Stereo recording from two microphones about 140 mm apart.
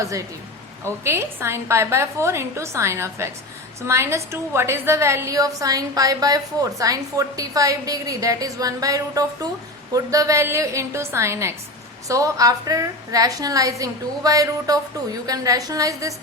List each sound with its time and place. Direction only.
0.0 s a woman's voice: 20° right (ahead or behind)